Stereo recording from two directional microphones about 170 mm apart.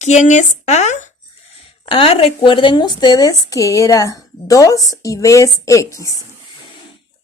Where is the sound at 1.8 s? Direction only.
35° left (ahead or behind).